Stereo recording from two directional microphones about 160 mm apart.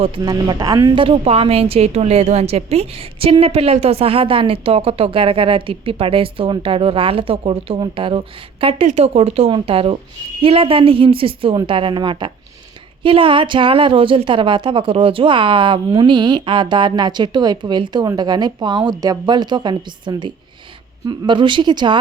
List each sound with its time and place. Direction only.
0.2 s a woman's voice: 25° right (ahead or behind)
1.0 s a woman's voice: 35° right (ahead or behind)